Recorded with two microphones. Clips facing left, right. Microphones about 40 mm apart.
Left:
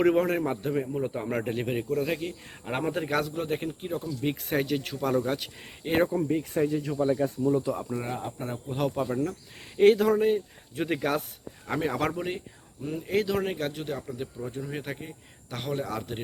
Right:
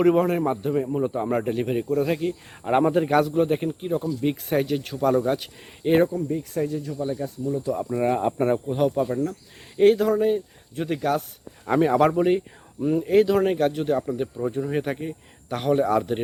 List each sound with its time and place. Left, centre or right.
0.0 s speech: centre
6.1 s speech: left
6.7 s speech: left
7.7 s speech: centre
8.0 s speech: right
8.3 s speech: right
8.7 s speech: centre
11.6 s speech: centre